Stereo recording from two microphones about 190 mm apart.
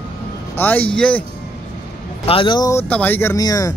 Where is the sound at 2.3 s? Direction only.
25° left (ahead or behind).